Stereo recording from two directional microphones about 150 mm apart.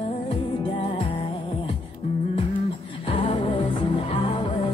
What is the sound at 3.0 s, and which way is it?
Music, 40° left (ahead or behind).